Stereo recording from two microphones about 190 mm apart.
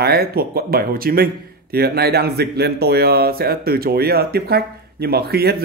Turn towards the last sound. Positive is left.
turn(degrees=-55)  # may be behind; listen again after turning